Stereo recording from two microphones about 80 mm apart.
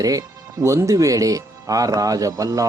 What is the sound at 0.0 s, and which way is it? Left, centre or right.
Speech, right.